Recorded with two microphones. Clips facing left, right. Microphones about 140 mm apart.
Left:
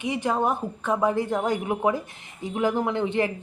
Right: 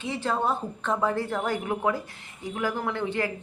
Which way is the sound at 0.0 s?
15° left (ahead or behind).